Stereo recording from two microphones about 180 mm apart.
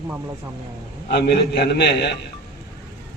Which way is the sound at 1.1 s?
65° left (ahead or behind).